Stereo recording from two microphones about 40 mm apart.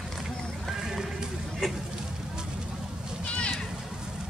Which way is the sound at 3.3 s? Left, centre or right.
Left.